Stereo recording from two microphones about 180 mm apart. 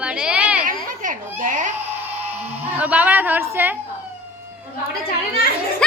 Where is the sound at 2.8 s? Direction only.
10° right (ahead or behind).